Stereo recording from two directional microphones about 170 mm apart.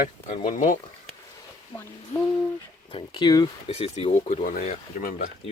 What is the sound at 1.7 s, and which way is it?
Speech, 20° left (ahead or behind).